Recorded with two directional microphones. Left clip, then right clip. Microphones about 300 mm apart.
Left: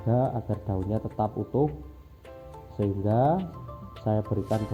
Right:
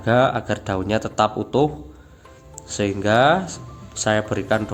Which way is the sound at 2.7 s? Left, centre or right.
Centre.